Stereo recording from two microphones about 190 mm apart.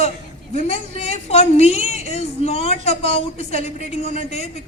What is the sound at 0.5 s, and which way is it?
A woman's voice, 35° left (ahead or behind).